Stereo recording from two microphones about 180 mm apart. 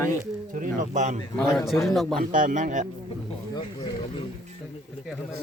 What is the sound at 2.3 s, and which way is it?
Speech, 45° right (ahead or behind).